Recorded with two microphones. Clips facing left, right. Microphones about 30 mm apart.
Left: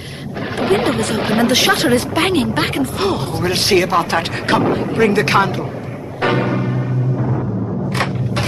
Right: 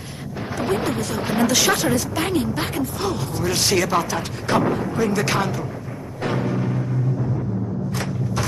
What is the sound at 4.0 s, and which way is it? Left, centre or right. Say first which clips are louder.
Speech: left 7 dB; left.